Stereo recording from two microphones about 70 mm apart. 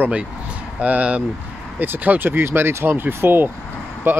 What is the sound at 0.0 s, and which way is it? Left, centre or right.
Speech, centre.